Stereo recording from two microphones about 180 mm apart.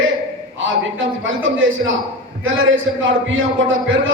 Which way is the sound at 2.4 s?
90° right.